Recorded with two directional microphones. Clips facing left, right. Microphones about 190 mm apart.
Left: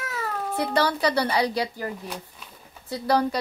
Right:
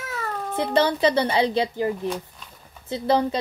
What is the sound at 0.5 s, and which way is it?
A woman's voice, 25° right (ahead or behind).